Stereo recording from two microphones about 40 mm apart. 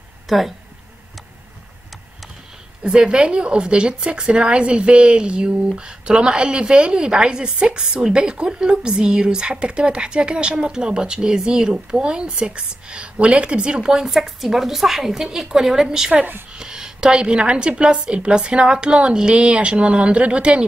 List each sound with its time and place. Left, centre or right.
0.3 s speech: centre
2.8 s a woman's voice: right